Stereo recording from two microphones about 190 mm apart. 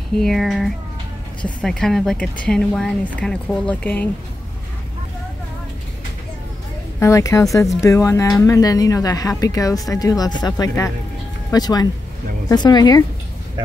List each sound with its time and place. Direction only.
0.2 s speech: centre (ahead or behind)
7.0 s speech: 15° left (ahead or behind)